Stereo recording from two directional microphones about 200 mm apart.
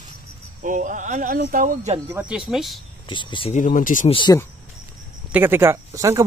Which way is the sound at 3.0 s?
25° left (ahead or behind).